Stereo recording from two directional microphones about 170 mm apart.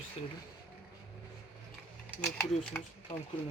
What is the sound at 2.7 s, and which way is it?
Speech, 10° left (ahead or behind).